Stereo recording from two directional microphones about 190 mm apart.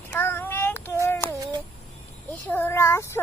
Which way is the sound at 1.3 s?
20° right (ahead or behind).